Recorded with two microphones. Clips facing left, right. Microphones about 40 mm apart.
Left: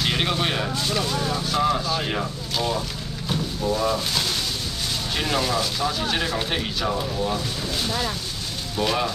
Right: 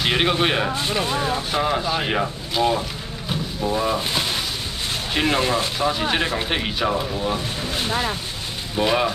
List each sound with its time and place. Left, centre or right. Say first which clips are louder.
0.0 s speech: right 4 dB; right
3.3 s a sound: even; right
5.1 s speech: right 4 dB; right
7.3 s speech: right 2 dB; right